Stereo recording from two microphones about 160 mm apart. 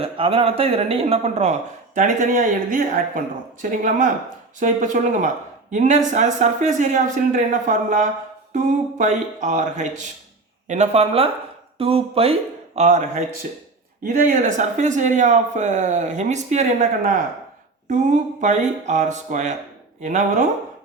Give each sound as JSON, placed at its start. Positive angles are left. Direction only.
{"t": 0.0, "sound": "speech", "side_deg": -35}
{"t": 2.0, "sound": "speech", "side_deg": -55}